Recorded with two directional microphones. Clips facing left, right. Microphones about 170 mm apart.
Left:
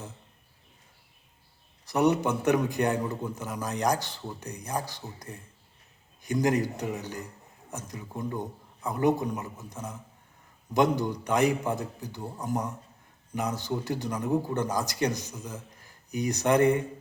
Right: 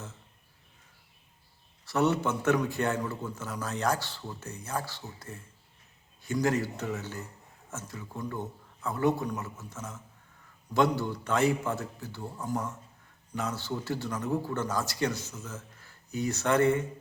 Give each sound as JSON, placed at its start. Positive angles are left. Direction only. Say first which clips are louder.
{"t": 1.8, "sound": "a man's voice", "louder": "left 3 dB", "side_deg": 15}